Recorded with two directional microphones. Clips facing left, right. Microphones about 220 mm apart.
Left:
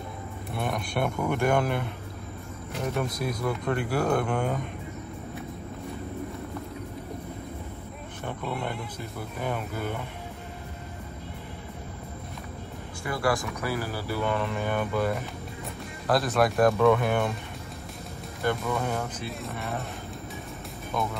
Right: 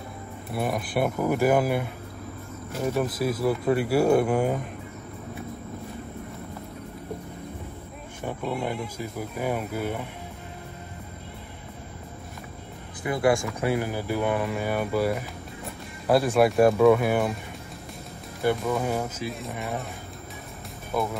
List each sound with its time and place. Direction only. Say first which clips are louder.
0.6 s speech: right 3 dB; 5° right (ahead or behind)
8.4 s speech: right 4 dB; centre (ahead or behind)
13.0 s speech: right 5 dB; 20° right (ahead or behind)
18.4 s speech: right 3 dB; 10° right (ahead or behind)
20.9 s speech: right 3 dB; 5° right (ahead or behind)